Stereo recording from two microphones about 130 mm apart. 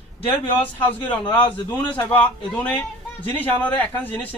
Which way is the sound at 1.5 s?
15° left (ahead or behind).